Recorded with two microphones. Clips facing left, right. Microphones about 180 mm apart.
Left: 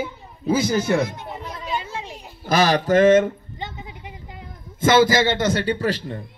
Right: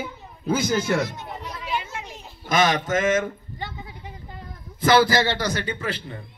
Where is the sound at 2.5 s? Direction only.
35° left (ahead or behind).